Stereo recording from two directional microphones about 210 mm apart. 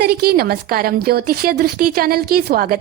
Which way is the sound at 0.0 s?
50° right (ahead or behind).